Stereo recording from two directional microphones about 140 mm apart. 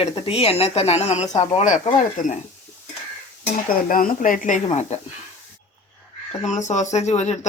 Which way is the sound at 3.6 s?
80° left.